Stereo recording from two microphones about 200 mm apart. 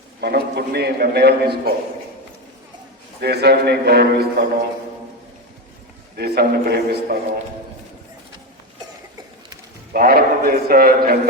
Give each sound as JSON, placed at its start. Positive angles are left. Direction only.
{"t": 0.2, "sound": "a man's voice", "side_deg": -50}
{"t": 3.2, "sound": "a man's voice", "side_deg": -55}
{"t": 6.1, "sound": "a man's voice", "side_deg": -50}
{"t": 9.9, "sound": "a man's voice", "side_deg": -45}